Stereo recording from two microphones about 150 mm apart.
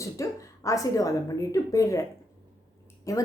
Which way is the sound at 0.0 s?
20° left (ahead or behind).